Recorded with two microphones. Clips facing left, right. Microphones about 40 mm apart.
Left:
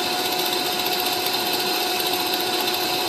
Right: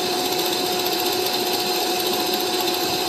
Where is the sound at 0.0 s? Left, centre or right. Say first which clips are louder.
Right 1 dB; centre.